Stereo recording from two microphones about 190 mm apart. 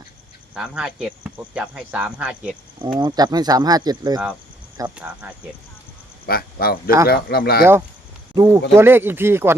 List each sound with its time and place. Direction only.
0.5 s speech: 5° right (ahead or behind)
2.7 s speech: 25° right (ahead or behind)
4.9 s speech: 5° right (ahead or behind)
6.2 s speech: 50° left (ahead or behind)
7.6 s speech: 10° right (ahead or behind)